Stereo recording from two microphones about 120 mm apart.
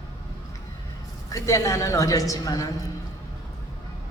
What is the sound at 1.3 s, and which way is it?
A woman's voice, 25° left (ahead or behind).